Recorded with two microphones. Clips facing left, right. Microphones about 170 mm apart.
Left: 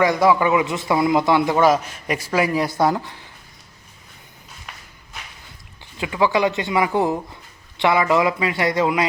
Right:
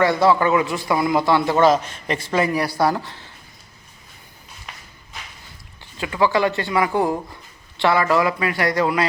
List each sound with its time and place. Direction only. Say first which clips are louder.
0.0 s a man's voice: even; 15° left (ahead or behind)
2.6 s a man's voice: left 1 dB; 20° left (ahead or behind)
5.8 s speech: even; 15° left (ahead or behind)